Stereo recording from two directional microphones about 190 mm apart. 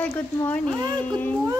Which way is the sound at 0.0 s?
10° left (ahead or behind).